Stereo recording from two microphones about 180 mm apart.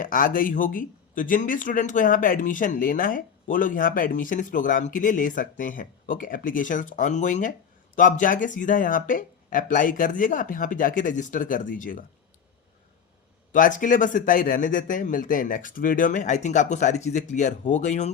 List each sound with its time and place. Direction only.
0.0 s speech: 50° left (ahead or behind)
13.5 s speech: 45° left (ahead or behind)